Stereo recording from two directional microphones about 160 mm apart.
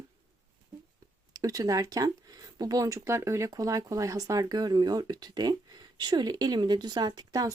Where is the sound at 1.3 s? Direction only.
20° right (ahead or behind).